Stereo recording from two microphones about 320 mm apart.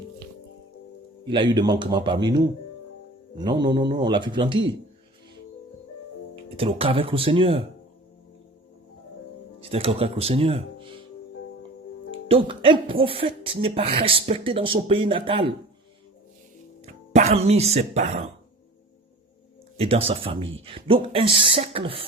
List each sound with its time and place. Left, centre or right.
1.2 s speech: centre
3.3 s speech: centre
6.6 s speech: centre
9.6 s speech: centre
12.3 s speech: centre
16.8 s speech: right
19.8 s speech: centre